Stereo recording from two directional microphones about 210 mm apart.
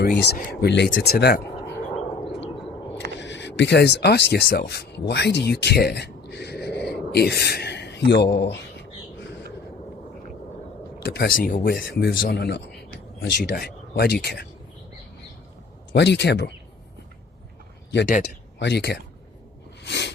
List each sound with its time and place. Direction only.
0.0 s a man's voice: 50° left (ahead or behind)
3.2 s speech: 55° left (ahead or behind)
11.0 s a man's voice: 50° left (ahead or behind)
15.9 s speech: 55° left (ahead or behind)
18.6 s a man's voice: 50° left (ahead or behind)
19.8 s a sound: 55° left (ahead or behind)